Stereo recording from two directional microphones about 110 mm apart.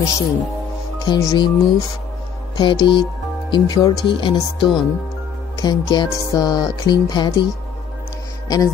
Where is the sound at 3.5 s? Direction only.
40° left (ahead or behind).